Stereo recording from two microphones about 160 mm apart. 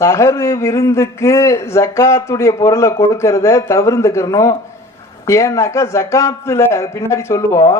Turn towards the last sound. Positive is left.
turn(degrees=20)  # may be behind; listen again after turning